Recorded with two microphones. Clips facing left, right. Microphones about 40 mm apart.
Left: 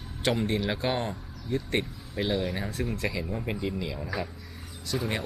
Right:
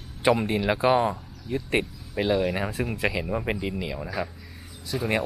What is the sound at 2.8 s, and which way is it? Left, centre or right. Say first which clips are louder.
Speech: right 4 dB; right.